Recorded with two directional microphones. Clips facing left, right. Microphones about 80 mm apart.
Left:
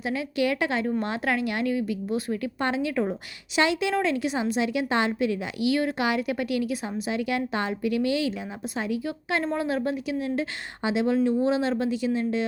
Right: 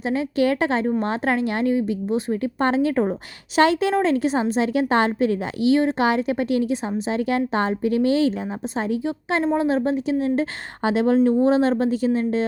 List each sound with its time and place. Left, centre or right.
0.0 s a woman's voice: right
10.8 s a woman's voice: right